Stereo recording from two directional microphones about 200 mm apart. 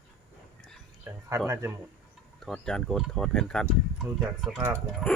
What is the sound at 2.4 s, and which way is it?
Speech, centre (ahead or behind).